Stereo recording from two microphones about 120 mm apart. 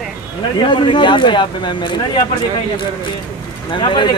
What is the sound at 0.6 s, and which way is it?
Speech, 45° left (ahead or behind).